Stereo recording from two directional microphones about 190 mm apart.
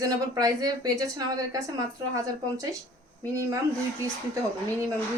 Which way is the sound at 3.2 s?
15° right (ahead or behind).